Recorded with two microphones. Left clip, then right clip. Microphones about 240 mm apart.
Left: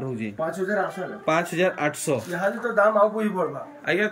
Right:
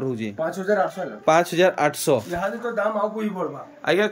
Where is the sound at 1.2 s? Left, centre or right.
Centre.